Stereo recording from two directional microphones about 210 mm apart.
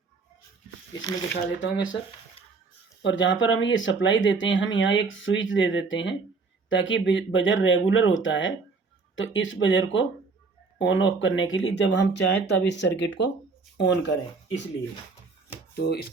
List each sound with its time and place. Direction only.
1.3 s speech: 60° left (ahead or behind)
3.0 s speech: 60° left (ahead or behind)
15.7 s speech: 50° left (ahead or behind)